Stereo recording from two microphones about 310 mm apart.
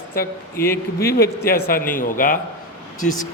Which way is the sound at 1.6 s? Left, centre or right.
Left.